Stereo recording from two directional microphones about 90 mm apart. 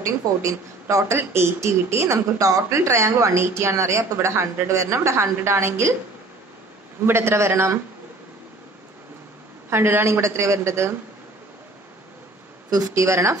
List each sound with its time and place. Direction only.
0.0 s speech: 35° right (ahead or behind)
7.1 s a woman's voice: 30° right (ahead or behind)
9.7 s a woman's voice: 25° right (ahead or behind)
12.6 s speech: 45° right (ahead or behind)